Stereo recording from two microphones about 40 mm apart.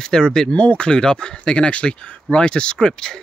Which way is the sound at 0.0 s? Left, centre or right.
Centre.